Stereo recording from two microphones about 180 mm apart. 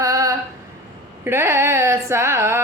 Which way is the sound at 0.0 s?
20° right (ahead or behind).